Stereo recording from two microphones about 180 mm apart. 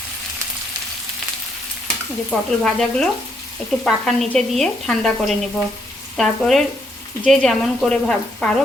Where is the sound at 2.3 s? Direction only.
Centre (ahead or behind).